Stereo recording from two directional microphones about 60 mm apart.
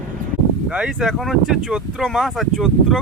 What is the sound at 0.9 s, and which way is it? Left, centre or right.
Speech, centre.